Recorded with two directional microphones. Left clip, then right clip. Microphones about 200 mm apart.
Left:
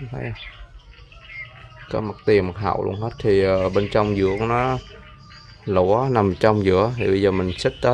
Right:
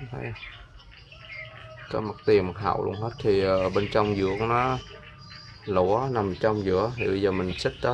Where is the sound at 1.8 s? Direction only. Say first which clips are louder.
Left 4 dB; 20° left (ahead or behind).